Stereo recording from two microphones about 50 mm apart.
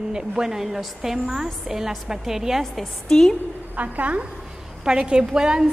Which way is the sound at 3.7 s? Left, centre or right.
Right.